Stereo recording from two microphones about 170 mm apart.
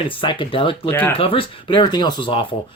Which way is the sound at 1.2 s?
30° left (ahead or behind).